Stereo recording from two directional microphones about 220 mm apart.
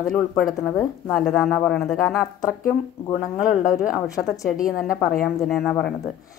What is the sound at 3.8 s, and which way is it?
Speech, centre (ahead or behind).